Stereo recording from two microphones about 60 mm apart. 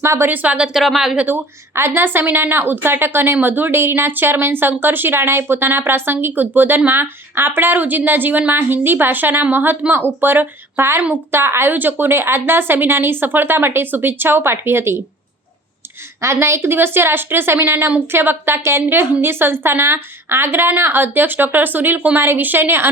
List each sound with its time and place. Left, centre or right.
0.0 s a woman's voice: right
0.3 s speech: right
0.7 s speech: centre
1.3 s a woman's voice: right
16.2 s speech: right